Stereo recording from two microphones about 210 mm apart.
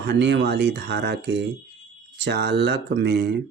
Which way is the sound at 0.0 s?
55° right (ahead or behind).